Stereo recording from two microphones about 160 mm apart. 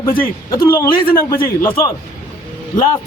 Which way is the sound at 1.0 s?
65° left (ahead or behind).